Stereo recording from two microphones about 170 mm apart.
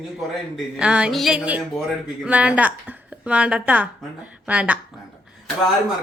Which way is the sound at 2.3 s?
10° right (ahead or behind).